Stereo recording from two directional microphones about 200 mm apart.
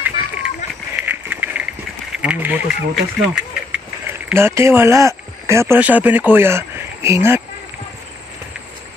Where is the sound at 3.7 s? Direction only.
10° right (ahead or behind).